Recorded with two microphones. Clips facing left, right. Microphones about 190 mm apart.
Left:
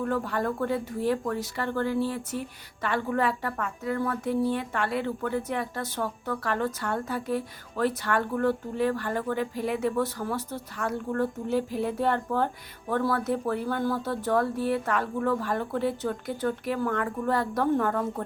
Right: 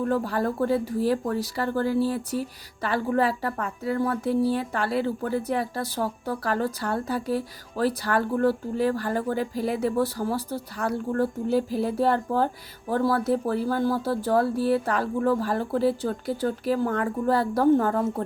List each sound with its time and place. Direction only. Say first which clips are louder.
0.1 s speech: right 3 dB; 35° right (ahead or behind)